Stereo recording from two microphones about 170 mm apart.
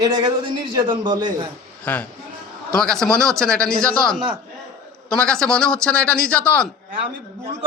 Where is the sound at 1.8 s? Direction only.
10° left (ahead or behind).